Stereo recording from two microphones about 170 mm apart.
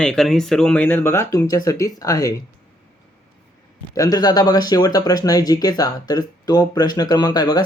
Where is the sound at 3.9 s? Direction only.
20° left (ahead or behind).